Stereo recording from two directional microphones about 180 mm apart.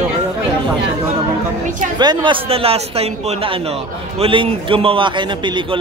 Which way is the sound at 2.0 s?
25° right (ahead or behind).